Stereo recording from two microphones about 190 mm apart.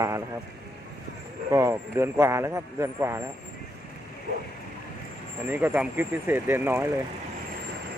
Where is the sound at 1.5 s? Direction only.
15° right (ahead or behind).